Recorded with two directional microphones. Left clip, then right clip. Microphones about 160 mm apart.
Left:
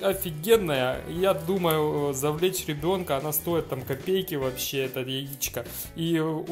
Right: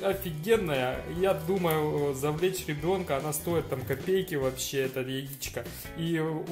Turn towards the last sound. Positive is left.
turn(degrees=40)  # may be behind; listen again after turning